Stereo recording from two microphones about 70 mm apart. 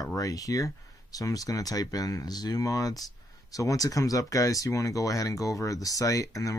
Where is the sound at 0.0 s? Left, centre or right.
Left.